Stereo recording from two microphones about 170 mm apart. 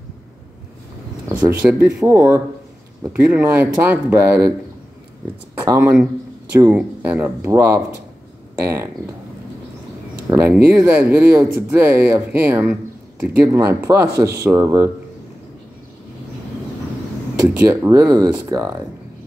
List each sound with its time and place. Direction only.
1.4 s speech: 15° right (ahead or behind)
5.7 s speech: 15° right (ahead or behind)
10.3 s speech: 10° right (ahead or behind)
17.6 s speech: 20° right (ahead or behind)